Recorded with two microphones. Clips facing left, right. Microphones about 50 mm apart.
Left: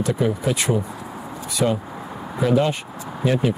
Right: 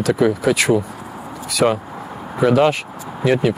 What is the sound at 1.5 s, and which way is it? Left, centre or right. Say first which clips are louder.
Speech: right 5 dB; right.